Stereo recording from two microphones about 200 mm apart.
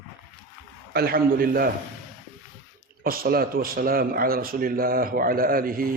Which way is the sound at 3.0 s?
45° right (ahead or behind).